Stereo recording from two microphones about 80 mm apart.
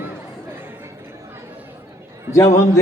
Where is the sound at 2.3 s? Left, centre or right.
Left.